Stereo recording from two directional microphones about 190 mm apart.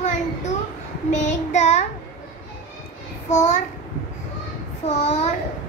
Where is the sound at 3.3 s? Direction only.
40° left (ahead or behind).